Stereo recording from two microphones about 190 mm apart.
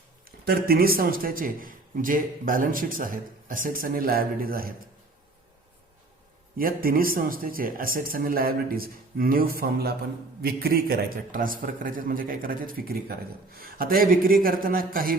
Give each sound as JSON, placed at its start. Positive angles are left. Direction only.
{"t": 0.4, "sound": "a man's voice", "side_deg": -55}
{"t": 6.6, "sound": "a man's voice", "side_deg": -50}